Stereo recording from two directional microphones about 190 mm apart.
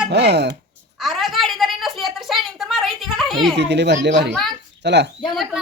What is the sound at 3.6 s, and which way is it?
Speech, 65° right (ahead or behind).